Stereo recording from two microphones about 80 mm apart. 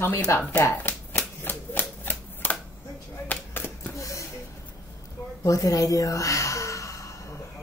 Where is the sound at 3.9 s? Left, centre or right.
Left.